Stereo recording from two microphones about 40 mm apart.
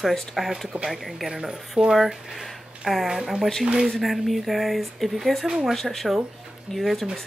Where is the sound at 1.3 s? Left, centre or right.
Centre.